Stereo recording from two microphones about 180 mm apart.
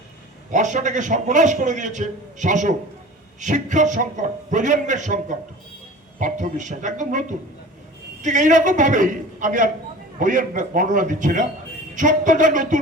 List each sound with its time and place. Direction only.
0.5 s a man's voice: 45° right (ahead or behind)